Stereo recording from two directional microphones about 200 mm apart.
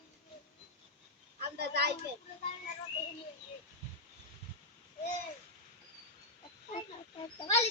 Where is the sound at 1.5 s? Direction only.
55° right (ahead or behind).